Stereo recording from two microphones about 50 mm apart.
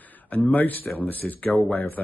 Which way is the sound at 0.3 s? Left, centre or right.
Left.